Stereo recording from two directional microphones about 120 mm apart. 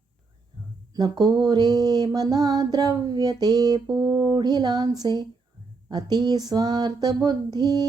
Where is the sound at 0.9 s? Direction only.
35° right (ahead or behind).